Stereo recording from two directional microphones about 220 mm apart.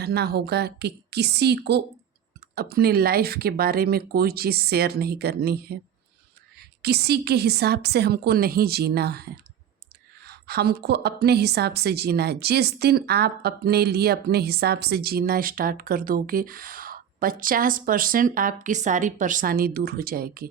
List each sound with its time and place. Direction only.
0.0 s a woman's voice: 45° right (ahead or behind)
10.2 s a woman's voice: 45° right (ahead or behind)